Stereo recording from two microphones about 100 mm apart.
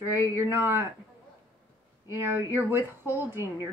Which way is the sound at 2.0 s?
25° right (ahead or behind).